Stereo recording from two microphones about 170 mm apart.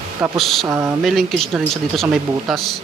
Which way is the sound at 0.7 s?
15° right (ahead or behind).